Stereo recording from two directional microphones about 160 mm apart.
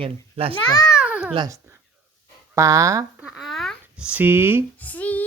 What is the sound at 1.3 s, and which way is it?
Speech, 20° right (ahead or behind).